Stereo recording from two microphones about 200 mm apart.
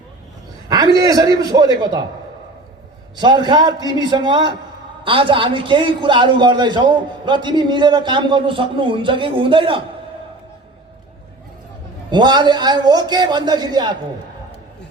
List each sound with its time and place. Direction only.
0.7 s a man's voice: 20° right (ahead or behind)
3.2 s a man's voice: 20° right (ahead or behind)
12.1 s a man's voice: 20° right (ahead or behind)